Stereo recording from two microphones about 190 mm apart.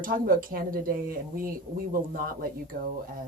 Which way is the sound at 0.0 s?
50° right (ahead or behind).